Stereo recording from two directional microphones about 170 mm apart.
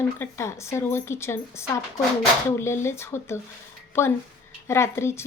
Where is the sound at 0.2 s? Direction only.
15° left (ahead or behind).